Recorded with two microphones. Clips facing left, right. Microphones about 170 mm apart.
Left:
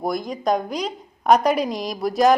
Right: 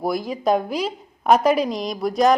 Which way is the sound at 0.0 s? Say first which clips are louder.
Right 2 dB; 5° right (ahead or behind).